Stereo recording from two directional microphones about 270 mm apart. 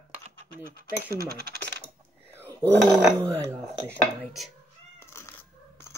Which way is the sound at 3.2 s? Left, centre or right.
Centre.